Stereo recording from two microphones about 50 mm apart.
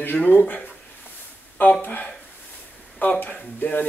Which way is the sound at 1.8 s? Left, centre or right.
Left.